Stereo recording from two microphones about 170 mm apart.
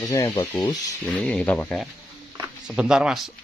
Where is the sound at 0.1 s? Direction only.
15° left (ahead or behind).